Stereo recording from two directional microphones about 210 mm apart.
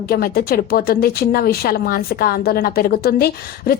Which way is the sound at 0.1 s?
45° left (ahead or behind).